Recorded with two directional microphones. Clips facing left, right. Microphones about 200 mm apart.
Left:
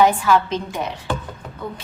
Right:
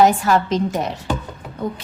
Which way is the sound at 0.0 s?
45° right (ahead or behind).